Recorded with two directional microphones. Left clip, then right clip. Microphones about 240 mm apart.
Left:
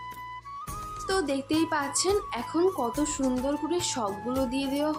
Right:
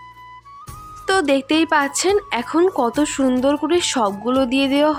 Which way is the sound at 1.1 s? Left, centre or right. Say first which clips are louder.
Right 11 dB; right.